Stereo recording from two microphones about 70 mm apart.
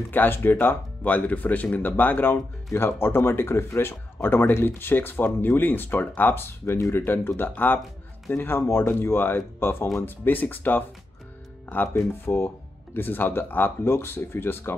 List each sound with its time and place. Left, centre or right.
0.1 s speech: left